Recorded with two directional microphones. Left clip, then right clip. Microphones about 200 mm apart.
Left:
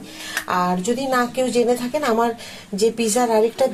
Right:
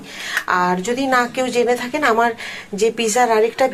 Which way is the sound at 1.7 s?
25° right (ahead or behind).